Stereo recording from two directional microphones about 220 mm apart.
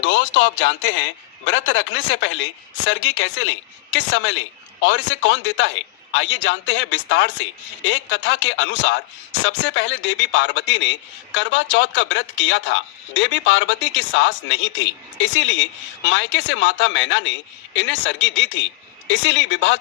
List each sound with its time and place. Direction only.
0.0 s speech: 60° left (ahead or behind)